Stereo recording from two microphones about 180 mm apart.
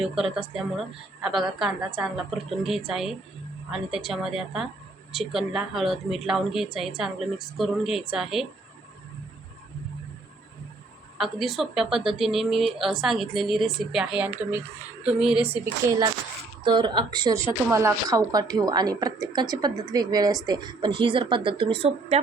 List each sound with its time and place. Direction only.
0.0 s a woman's voice: centre (ahead or behind)
11.2 s a woman's voice: centre (ahead or behind)
16.6 s a woman's voice: 25° right (ahead or behind)